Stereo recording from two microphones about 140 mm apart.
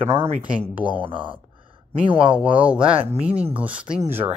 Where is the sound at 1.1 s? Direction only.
35° right (ahead or behind).